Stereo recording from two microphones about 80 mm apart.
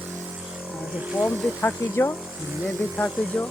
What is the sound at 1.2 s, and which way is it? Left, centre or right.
Speech, centre.